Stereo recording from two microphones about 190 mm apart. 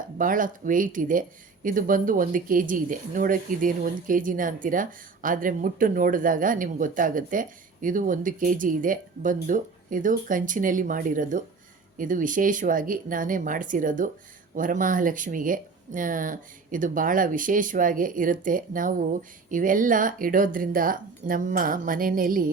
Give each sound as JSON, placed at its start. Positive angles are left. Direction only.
{"t": 0.2, "sound": "speech", "side_deg": -45}